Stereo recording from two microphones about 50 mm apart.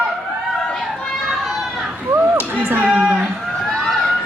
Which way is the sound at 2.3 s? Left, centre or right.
Right.